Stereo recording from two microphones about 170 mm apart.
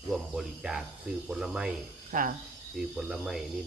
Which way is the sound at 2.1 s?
55° right (ahead or behind).